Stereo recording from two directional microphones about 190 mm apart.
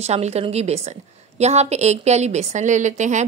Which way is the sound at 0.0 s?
35° right (ahead or behind).